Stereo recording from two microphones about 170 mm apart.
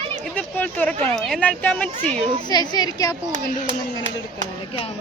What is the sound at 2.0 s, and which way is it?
Speech, 45° right (ahead or behind).